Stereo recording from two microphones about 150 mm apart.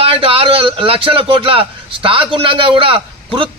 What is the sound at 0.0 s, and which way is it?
A man's voice, 35° right (ahead or behind).